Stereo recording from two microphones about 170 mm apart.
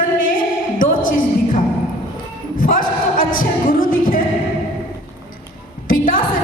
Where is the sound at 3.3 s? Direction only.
55° left (ahead or behind).